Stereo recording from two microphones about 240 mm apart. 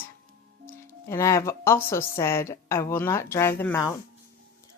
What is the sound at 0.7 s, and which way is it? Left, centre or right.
Speech, centre.